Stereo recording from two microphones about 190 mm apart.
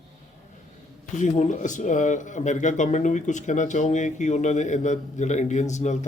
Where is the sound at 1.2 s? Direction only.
40° left (ahead or behind).